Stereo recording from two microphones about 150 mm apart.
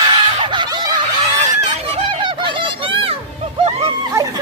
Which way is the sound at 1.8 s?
35° right (ahead or behind).